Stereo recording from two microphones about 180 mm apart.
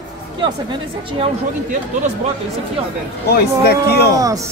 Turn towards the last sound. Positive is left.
turn(degrees=-20)  # may be behind; listen again after turning